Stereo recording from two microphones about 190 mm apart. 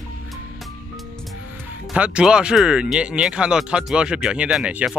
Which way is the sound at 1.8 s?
5° right (ahead or behind).